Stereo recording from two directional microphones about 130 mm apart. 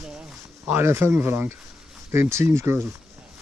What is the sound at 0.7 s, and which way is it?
Speech, 20° right (ahead or behind).